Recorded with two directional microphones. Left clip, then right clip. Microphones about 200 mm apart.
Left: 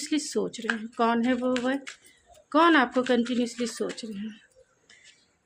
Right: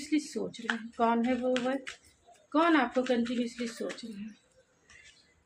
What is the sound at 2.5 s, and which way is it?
A woman's voice, 50° left (ahead or behind).